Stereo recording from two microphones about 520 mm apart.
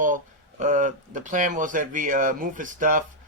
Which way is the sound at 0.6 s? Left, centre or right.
Centre.